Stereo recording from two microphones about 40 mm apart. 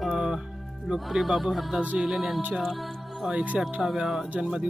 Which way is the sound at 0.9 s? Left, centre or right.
Centre.